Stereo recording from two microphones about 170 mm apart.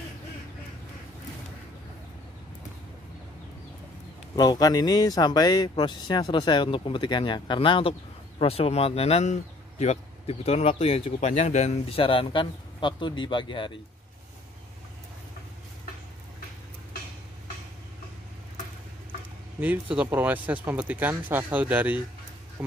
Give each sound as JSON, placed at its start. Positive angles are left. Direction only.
{"t": 4.4, "sound": "speech", "side_deg": 20}
{"t": 19.6, "sound": "speech", "side_deg": -10}